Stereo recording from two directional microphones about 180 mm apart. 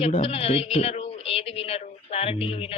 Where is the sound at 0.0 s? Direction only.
35° left (ahead or behind).